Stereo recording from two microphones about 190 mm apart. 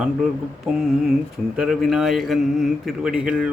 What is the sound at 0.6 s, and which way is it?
A man's voice, 5° right (ahead or behind).